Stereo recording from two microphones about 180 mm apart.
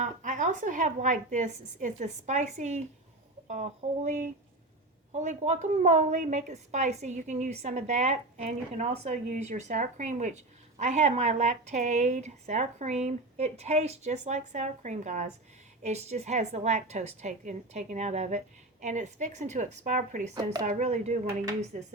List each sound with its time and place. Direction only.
0.0 s a woman's voice: 45° right (ahead or behind)